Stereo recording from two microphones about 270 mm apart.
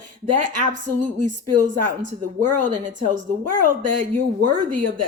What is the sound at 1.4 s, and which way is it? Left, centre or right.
A woman's voice, right.